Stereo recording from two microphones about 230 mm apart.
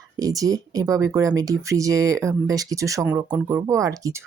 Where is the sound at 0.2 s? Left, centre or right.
Centre.